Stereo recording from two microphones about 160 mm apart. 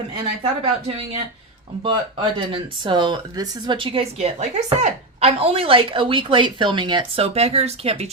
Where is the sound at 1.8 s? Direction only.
30° right (ahead or behind).